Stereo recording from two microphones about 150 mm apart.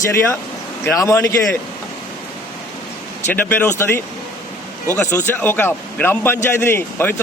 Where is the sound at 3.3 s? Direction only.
10° left (ahead or behind).